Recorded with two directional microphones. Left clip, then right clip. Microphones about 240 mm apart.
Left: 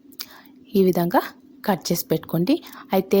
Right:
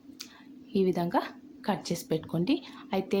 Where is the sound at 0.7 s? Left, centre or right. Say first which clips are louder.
Left 9 dB; left.